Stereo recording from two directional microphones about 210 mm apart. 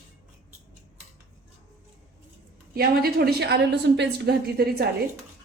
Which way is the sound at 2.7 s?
45° right (ahead or behind).